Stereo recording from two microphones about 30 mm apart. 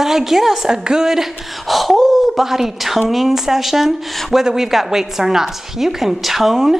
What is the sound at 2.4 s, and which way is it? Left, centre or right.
A woman's voice, centre.